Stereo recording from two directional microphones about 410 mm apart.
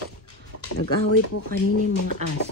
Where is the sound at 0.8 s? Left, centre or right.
Left.